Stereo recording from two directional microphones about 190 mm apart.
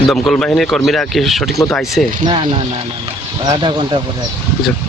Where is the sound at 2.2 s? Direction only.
25° right (ahead or behind).